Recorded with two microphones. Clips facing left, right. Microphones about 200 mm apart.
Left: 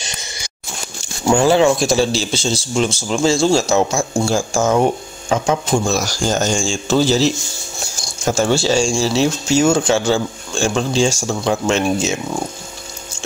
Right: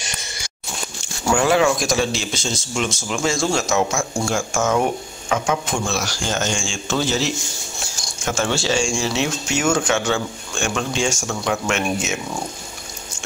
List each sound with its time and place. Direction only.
1.3 s a man's voice: 30° left (ahead or behind)